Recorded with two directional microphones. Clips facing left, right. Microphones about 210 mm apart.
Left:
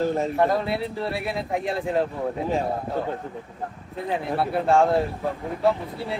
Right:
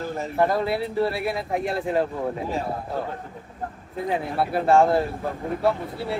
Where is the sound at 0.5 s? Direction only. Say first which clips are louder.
Even; centre (ahead or behind).